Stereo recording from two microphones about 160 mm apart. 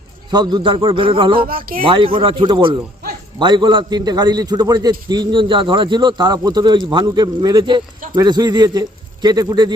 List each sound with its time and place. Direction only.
0.3 s a man's voice: 25° right (ahead or behind)
1.4 s speech: 65° right (ahead or behind)
1.8 s a man's voice: 35° right (ahead or behind)